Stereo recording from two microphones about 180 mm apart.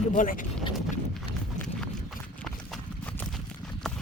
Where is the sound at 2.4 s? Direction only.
5° left (ahead or behind).